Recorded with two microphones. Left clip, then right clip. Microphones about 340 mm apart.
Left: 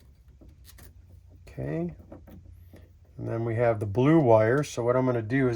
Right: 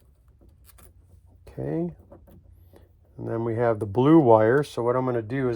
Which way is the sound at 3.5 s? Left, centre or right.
Right.